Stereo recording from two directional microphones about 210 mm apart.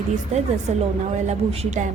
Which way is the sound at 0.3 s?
35° right (ahead or behind).